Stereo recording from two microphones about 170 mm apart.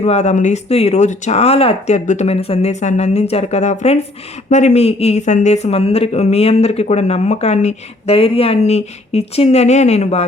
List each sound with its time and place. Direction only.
0.0 s speech: 40° left (ahead or behind)